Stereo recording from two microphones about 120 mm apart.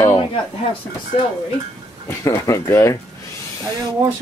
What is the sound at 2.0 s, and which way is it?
Speech, 25° left (ahead or behind).